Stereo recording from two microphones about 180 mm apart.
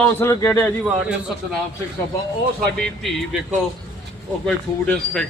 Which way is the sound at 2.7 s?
Centre (ahead or behind).